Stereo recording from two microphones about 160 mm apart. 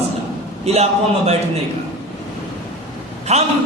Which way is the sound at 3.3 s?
40° right (ahead or behind).